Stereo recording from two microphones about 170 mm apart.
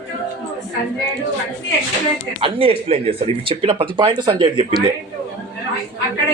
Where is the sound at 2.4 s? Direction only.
30° right (ahead or behind).